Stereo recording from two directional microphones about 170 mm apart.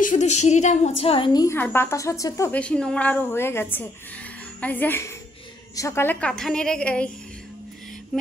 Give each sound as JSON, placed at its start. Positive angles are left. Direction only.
{"t": 0.0, "sound": "a woman's voice", "side_deg": 45}
{"t": 8.1, "sound": "mantra", "side_deg": 0}